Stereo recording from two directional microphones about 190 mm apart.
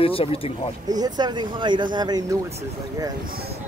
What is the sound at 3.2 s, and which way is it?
Speech, 50° right (ahead or behind).